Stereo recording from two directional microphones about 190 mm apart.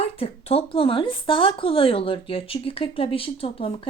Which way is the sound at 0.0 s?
30° left (ahead or behind).